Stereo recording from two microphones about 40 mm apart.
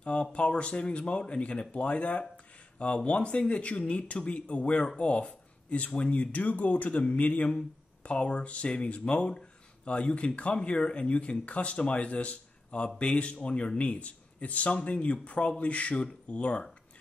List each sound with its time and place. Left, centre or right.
0.0 s speech: left